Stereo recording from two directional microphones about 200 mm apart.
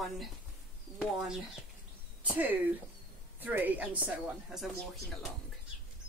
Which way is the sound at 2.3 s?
10° right (ahead or behind).